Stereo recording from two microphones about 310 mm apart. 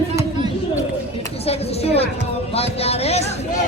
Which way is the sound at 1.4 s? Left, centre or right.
Centre.